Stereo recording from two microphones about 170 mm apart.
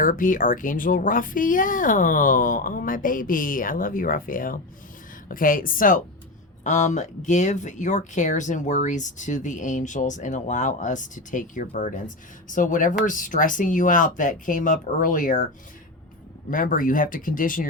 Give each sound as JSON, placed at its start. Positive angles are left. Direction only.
{"t": 0.0, "sound": "a woman's voice", "side_deg": 50}
{"t": 16.5, "sound": "speech", "side_deg": 55}